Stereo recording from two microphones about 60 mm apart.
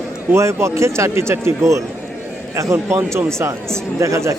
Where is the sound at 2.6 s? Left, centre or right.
Right.